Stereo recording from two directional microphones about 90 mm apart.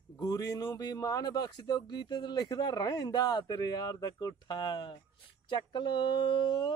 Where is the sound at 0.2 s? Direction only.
40° left (ahead or behind).